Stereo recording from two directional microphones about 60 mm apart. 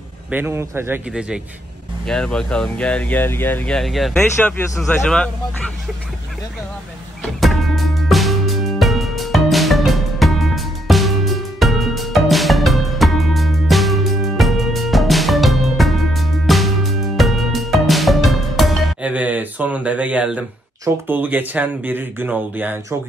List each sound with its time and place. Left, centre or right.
0.5 s speech: right
2.0 s speech: centre
3.3 s speech: left
3.8 s speech: centre
5.0 s speech: centre
7.3 s music: centre
19.0 s speech: right
21.1 s speech: right